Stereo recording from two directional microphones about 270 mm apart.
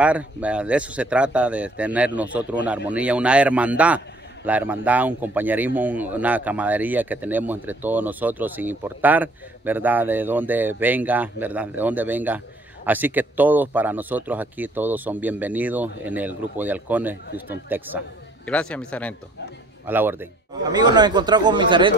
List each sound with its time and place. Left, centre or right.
0.0 s speech: centre
18.4 s speech: centre
19.9 s speech: centre